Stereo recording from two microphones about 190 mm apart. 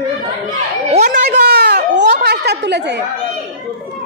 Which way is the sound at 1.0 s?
55° right (ahead or behind).